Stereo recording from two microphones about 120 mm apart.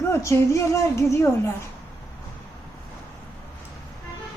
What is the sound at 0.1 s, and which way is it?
A woman's voice, 25° left (ahead or behind).